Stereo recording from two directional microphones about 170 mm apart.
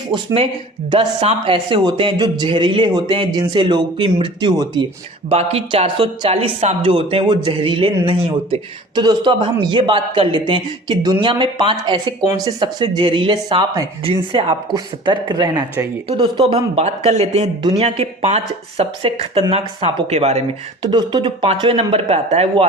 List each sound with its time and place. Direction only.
0.1 s speech: 30° right (ahead or behind)
5.3 s speech: 35° right (ahead or behind)
20.9 s speech: 25° right (ahead or behind)